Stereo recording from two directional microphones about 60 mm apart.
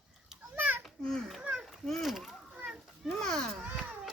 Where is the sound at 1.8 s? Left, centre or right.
Centre.